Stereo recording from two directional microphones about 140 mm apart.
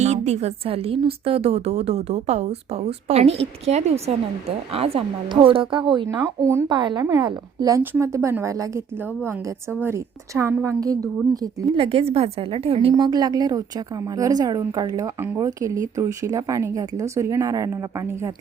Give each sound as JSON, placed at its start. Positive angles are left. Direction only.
{"t": 0.0, "sound": "a woman's voice", "side_deg": -50}
{"t": 6.7, "sound": "a woman's voice", "side_deg": -35}
{"t": 11.7, "sound": "a woman's voice", "side_deg": -40}
{"t": 13.1, "sound": "a woman's voice", "side_deg": -30}